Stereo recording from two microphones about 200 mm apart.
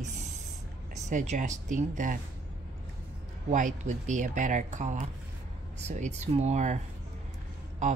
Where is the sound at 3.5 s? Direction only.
40° right (ahead or behind).